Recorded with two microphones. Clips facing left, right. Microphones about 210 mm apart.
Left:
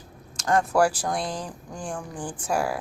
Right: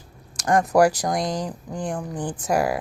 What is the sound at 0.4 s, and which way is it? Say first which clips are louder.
A woman's voice: right 4 dB; 15° right (ahead or behind).